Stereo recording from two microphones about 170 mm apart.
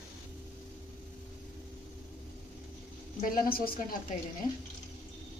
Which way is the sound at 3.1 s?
55° left (ahead or behind).